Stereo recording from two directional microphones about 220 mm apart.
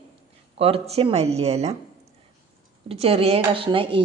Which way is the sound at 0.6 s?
25° right (ahead or behind).